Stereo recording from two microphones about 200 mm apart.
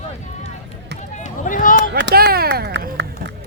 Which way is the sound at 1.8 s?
60° right (ahead or behind).